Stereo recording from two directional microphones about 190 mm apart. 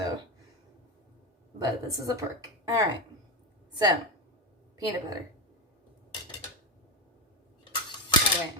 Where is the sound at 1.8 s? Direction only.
15° right (ahead or behind).